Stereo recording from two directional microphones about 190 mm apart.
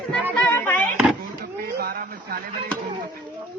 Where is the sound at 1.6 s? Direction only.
55° right (ahead or behind).